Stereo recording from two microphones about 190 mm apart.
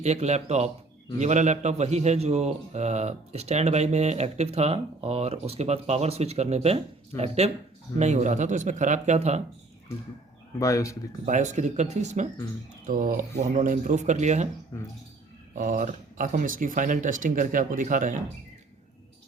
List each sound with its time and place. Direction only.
0.0 s a man's voice: 35° right (ahead or behind)
10.6 s speech: 15° left (ahead or behind)
11.3 s a man's voice: 40° right (ahead or behind)
15.5 s speech: 45° right (ahead or behind)